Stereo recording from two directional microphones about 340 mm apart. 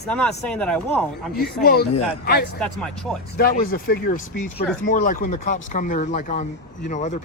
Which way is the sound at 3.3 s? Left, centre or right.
Left.